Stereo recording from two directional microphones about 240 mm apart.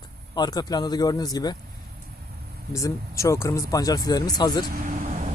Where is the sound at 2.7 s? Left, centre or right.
Centre.